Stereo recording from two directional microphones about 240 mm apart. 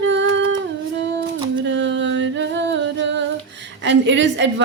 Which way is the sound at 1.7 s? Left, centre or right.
Right.